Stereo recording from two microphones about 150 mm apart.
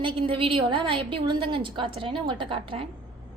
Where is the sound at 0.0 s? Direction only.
35° right (ahead or behind).